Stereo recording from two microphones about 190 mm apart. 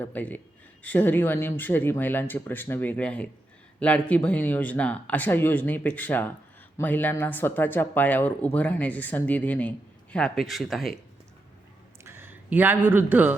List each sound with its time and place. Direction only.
0.0 s speech: 10° left (ahead or behind)
12.0 s a man's voice: 10° right (ahead or behind)